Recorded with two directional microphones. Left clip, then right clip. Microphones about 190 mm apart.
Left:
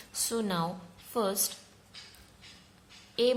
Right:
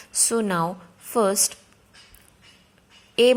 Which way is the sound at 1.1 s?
40° right (ahead or behind).